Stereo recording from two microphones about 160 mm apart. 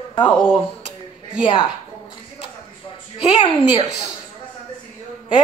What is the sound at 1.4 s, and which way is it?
Speech, 35° left (ahead or behind).